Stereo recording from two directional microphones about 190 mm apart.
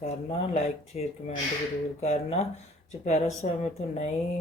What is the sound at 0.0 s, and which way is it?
Speech, 35° left (ahead or behind).